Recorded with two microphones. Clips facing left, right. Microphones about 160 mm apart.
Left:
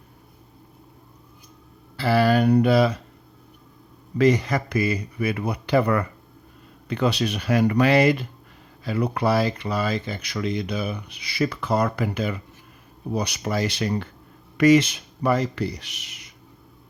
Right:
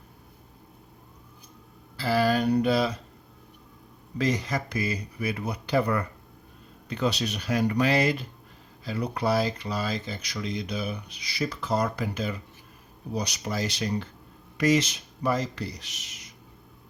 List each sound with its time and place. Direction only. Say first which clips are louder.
2.0 s speech: left 5 dB; 65° left (ahead or behind)
4.2 s speech: left 8 dB; 60° left (ahead or behind)